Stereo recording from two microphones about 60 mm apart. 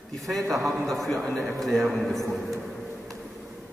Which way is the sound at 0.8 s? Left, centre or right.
Centre.